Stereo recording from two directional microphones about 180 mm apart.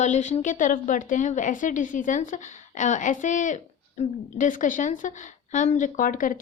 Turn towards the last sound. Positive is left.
turn(degrees=50)  # may be behind; listen again after turning